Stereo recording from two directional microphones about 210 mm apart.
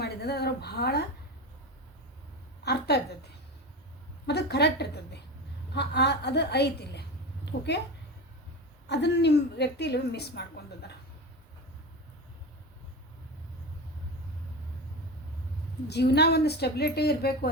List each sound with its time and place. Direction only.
0.0 s speech: 50° left (ahead or behind)
2.6 s a woman's voice: 50° left (ahead or behind)
4.3 s a woman's voice: 50° left (ahead or behind)
8.9 s a woman's voice: 55° left (ahead or behind)
15.9 s a woman's voice: 50° left (ahead or behind)